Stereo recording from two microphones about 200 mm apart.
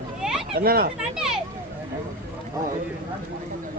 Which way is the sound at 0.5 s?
50° right (ahead or behind).